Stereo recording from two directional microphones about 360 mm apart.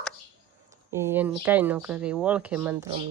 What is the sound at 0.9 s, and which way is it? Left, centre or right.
Speech, centre.